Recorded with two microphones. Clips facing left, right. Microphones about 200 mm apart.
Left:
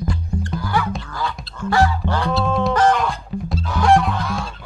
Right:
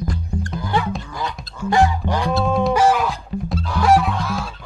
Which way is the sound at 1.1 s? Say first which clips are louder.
Left 1 dB; 15° right (ahead or behind).